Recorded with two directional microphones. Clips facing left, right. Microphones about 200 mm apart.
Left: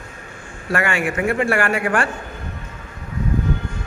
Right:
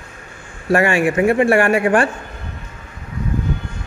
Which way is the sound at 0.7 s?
25° right (ahead or behind).